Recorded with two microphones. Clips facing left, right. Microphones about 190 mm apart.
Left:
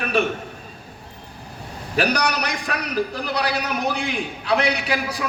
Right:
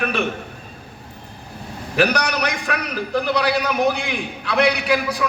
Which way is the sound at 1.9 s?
40° left (ahead or behind).